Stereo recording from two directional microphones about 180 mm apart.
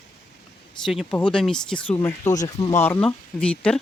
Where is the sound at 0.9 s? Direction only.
5° left (ahead or behind).